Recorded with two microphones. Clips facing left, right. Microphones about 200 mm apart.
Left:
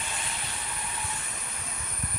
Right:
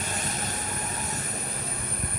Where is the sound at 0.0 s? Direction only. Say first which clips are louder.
Right 6 dB; 45° right (ahead or behind).